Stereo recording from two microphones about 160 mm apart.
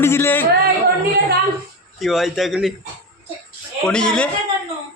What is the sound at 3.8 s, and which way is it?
Speech, 5° left (ahead or behind).